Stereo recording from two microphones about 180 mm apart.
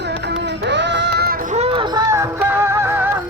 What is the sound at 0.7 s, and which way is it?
Child singing, 75° right (ahead or behind).